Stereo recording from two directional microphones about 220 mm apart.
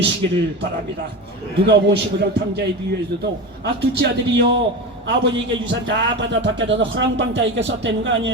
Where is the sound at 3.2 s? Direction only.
50° right (ahead or behind).